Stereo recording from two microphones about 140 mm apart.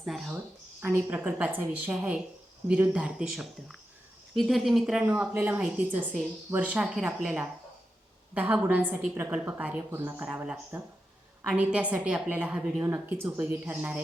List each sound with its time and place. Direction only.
0.0 s speech: centre (ahead or behind)
0.8 s speech: 15° right (ahead or behind)
8.3 s speech: 10° right (ahead or behind)